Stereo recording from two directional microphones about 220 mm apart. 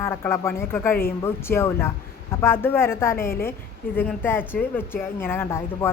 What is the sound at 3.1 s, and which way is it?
Speech, 40° left (ahead or behind).